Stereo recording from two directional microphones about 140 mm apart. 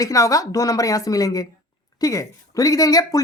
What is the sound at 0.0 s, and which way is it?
Speech, 25° left (ahead or behind).